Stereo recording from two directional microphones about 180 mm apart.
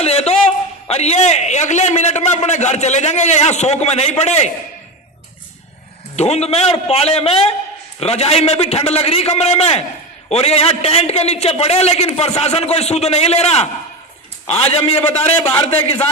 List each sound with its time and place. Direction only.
0.0 s a man's voice: 35° left (ahead or behind)
6.1 s a man's voice: 35° left (ahead or behind)
14.9 s a man's voice: 15° left (ahead or behind)